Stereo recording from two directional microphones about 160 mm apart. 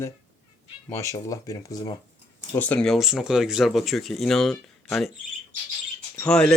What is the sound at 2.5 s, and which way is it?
Speech, 10° left (ahead or behind).